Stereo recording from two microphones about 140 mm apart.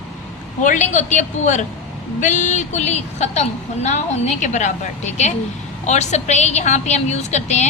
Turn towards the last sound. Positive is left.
turn(degrees=55)  # may be behind; listen again after turning